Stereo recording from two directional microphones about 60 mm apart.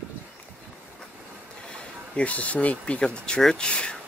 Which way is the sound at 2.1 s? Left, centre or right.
Left.